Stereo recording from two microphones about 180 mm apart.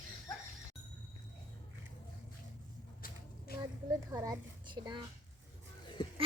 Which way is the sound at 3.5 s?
55° left (ahead or behind).